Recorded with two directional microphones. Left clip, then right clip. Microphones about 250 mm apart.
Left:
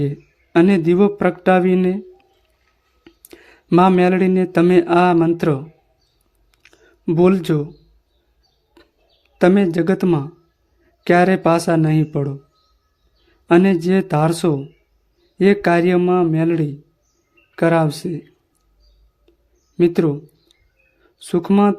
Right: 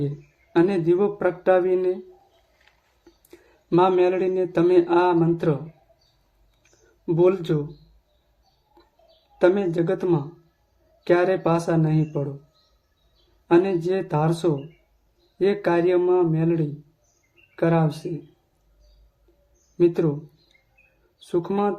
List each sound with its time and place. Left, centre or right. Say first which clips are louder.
0.5 s speech: left 5 dB; left
3.0 s speech: left 7 dB; left
6.6 s a sound: left 9 dB; left
9.4 s speech: left 4 dB; left
13.5 s speech: left 5 dB; left
19.7 s speech: left 4 dB; left
21.2 s speech: left 6 dB; left